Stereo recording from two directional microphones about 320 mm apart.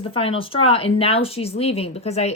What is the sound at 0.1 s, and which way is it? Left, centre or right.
Speech, centre.